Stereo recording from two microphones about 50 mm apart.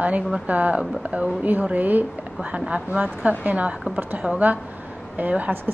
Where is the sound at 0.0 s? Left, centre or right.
Right.